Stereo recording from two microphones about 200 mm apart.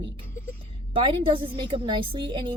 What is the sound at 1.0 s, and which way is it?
Speech, 25° right (ahead or behind).